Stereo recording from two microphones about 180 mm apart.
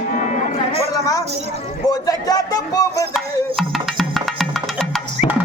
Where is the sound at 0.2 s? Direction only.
45° left (ahead or behind).